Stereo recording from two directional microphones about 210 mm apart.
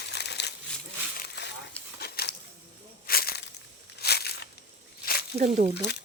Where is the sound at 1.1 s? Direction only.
45° left (ahead or behind).